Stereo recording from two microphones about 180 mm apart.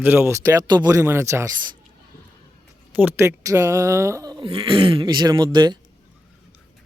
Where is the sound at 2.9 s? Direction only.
10° right (ahead or behind).